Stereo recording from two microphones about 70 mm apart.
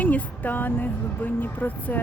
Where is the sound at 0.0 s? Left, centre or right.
Left.